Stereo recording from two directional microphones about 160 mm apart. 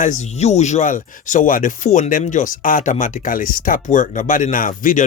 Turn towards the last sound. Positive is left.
turn(degrees=55)  # may be behind; listen again after turning